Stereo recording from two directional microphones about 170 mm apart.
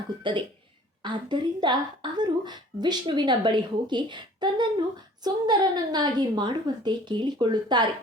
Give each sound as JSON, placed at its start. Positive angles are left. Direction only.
{"t": 0.2, "sound": "a woman's voice", "side_deg": -30}